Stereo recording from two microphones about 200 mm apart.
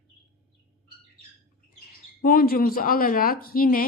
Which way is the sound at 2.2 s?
45° left (ahead or behind).